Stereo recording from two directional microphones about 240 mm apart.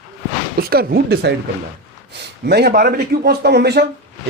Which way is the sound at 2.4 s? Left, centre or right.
Right.